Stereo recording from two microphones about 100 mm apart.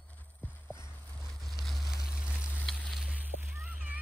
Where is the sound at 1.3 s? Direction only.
Centre (ahead or behind).